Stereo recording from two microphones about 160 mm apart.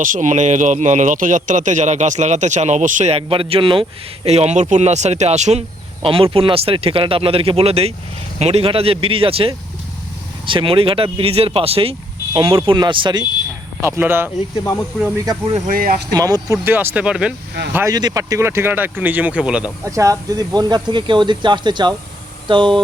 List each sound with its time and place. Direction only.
0.0 s a man's voice: 55° right (ahead or behind); by 13.2 s 30° right (ahead or behind)
13.8 s speech: 15° right (ahead or behind)
14.5 s speech: 20° left (ahead or behind)
15.5 s speech: 55° right (ahead or behind)
16.1 s speech: 25° right (ahead or behind); by 17.3 s 5° right (ahead or behind)
17.7 s speech: 20° right (ahead or behind); by 19.7 s 5° right (ahead or behind)
19.8 s speech: 20° right (ahead or behind)